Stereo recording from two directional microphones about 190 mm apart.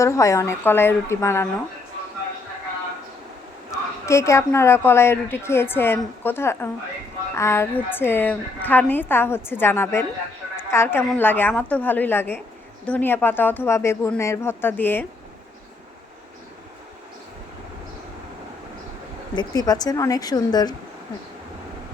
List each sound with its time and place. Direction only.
0.0 s a woman's voice: 15° left (ahead or behind)
3.7 s a woman's voice: 15° left (ahead or behind)
19.4 s speech: 20° left (ahead or behind)